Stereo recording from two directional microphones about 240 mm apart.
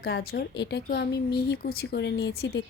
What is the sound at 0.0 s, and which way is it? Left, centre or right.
Speech, left.